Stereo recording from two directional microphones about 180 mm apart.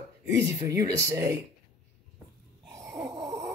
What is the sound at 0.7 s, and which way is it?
Speech, 15° right (ahead or behind).